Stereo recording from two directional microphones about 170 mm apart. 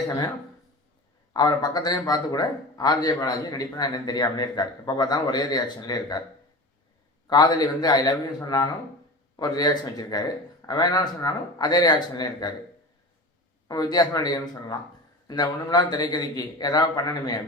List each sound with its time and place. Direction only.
1.3 s a man's voice: 25° left (ahead or behind)
7.3 s a man's voice: 25° left (ahead or behind)
13.7 s a man's voice: 25° left (ahead or behind)